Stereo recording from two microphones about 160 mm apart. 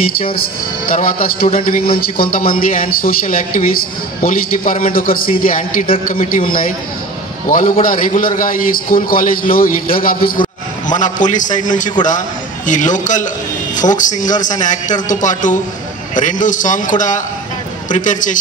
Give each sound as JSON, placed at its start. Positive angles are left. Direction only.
{"t": 0.8, "sound": "a man's voice", "side_deg": 65}
{"t": 10.9, "sound": "speech", "side_deg": 50}
{"t": 17.9, "sound": "speech", "side_deg": 55}